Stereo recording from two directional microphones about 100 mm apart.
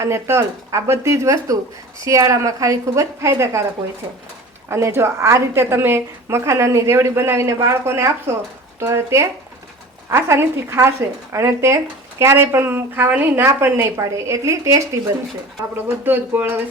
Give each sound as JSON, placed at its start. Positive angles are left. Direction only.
{"t": 0.0, "sound": "a woman's voice", "side_deg": -25}
{"t": 4.7, "sound": "a woman's voice", "side_deg": -25}
{"t": 16.0, "sound": "a woman's voice", "side_deg": -20}